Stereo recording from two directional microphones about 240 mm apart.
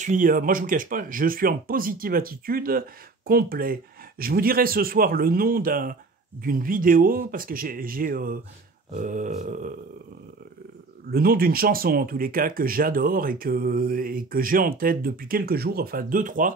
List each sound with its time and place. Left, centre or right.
0.0 s speech: right
11.1 s speech: right